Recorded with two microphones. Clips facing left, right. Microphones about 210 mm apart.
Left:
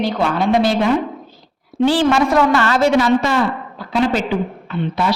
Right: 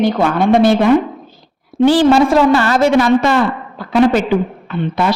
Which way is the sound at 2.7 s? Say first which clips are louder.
Right 3 dB; 55° right (ahead or behind).